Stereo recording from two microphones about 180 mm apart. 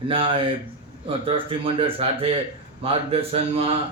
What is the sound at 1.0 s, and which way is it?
A man's voice, 30° right (ahead or behind).